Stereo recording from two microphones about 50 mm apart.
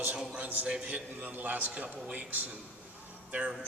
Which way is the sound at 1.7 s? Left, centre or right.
Right.